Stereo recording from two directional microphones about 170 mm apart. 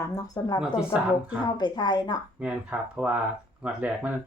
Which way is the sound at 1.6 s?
25° left (ahead or behind).